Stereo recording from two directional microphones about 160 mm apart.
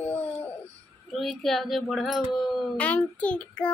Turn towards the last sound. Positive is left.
turn(degrees=5)  # may be behind; listen again after turning